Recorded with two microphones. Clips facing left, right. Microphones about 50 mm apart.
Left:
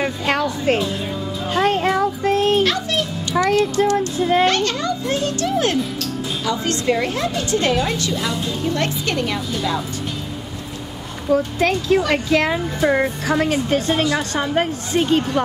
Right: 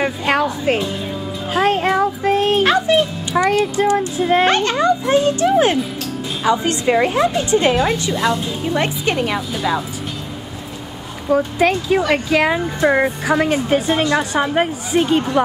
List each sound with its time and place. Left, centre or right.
0.0 s music: centre
1.5 s speech: centre
2.6 s music: right
3.4 s speech: centre
4.5 s a child's voice: right
11.2 s speech: centre